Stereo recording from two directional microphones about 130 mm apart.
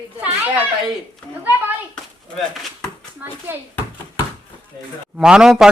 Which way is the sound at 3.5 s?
15° right (ahead or behind).